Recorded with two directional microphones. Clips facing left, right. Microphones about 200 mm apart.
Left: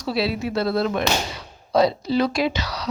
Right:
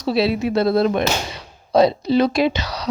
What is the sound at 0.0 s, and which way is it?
Speech, 25° right (ahead or behind).